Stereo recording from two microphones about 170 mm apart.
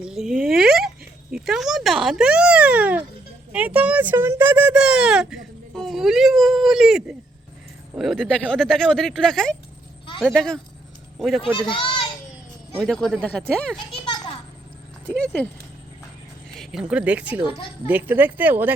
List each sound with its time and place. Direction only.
0.0 s speech: 5° right (ahead or behind)
11.7 s children playing: 30° left (ahead or behind)
12.7 s speech: 5° left (ahead or behind)
13.9 s children playing: 30° left (ahead or behind)
16.6 s a woman's voice: 5° right (ahead or behind)